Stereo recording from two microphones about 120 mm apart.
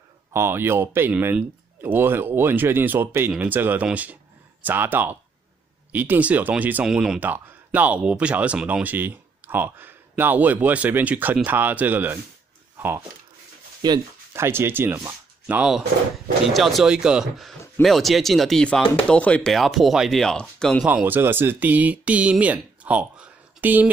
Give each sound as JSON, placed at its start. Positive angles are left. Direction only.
{"t": 0.3, "sound": "speech", "side_deg": -20}
{"t": 12.7, "sound": "a sound", "side_deg": -20}
{"t": 13.8, "sound": "speech", "side_deg": -35}
{"t": 14.3, "sound": "speech", "side_deg": -20}
{"t": 19.5, "sound": "speech", "side_deg": 0}
{"t": 20.8, "sound": "speech", "side_deg": -15}